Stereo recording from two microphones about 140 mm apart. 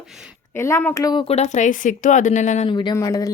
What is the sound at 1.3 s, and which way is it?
Speech, 55° left (ahead or behind).